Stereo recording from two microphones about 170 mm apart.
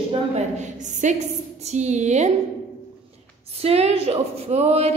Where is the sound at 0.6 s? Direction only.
45° right (ahead or behind).